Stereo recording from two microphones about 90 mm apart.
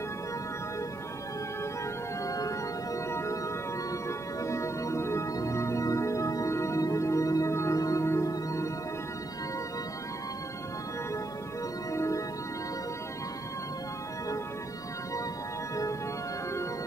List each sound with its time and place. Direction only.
2.2 s music: 40° left (ahead or behind)
4.4 s music: 35° left (ahead or behind)
11.9 s music: 35° left (ahead or behind)